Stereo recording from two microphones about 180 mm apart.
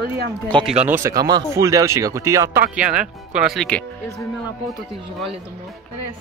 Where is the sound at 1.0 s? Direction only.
20° right (ahead or behind).